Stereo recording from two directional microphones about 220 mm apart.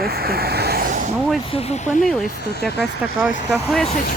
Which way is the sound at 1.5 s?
30° left (ahead or behind).